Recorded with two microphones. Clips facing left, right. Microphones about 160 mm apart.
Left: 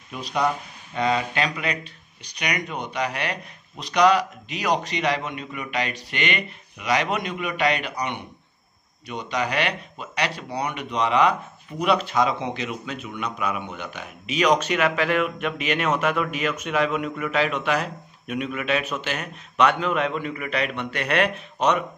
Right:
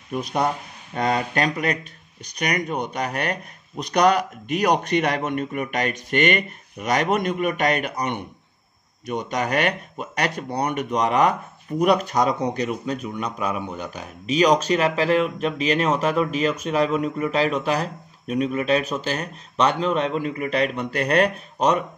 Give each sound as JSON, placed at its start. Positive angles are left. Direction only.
{"t": 0.1, "sound": "speech", "side_deg": -50}